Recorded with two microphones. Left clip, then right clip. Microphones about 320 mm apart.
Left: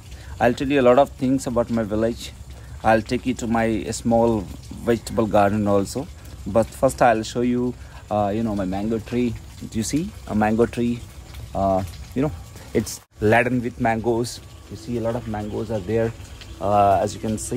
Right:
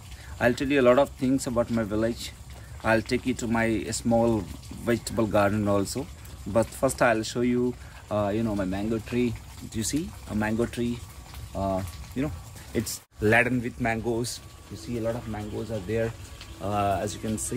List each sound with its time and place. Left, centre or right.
0.4 s speech: centre
16.6 s speech: centre